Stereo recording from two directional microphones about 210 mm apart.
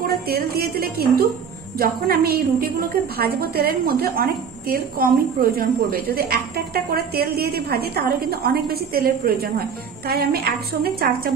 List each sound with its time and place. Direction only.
0.0 s a woman's voice: 45° right (ahead or behind)